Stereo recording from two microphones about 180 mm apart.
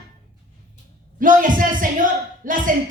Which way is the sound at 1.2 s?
50° right (ahead or behind).